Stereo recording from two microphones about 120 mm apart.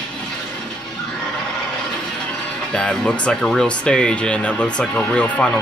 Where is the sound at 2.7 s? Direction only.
10° left (ahead or behind).